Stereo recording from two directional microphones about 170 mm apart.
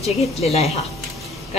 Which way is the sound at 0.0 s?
40° left (ahead or behind).